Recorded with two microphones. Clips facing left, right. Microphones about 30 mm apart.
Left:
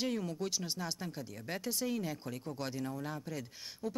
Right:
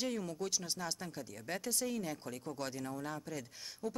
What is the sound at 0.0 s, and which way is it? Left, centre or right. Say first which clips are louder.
Speech: left 2 dB; centre.